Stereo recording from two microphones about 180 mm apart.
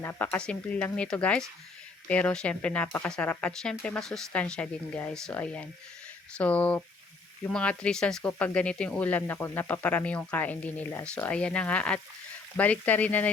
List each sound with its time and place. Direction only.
0.0 s speech: 10° left (ahead or behind)